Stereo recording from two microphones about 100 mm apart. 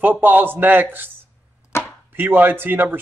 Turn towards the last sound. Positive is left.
turn(degrees=-20)  # may be behind; listen again after turning